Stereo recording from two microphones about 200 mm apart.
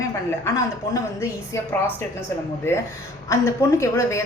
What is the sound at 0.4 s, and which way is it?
Speech, 15° left (ahead or behind).